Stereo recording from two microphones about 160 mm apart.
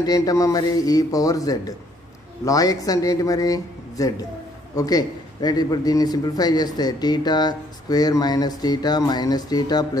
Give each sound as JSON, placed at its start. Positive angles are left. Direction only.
{"t": 0.0, "sound": "a man's voice", "side_deg": 25}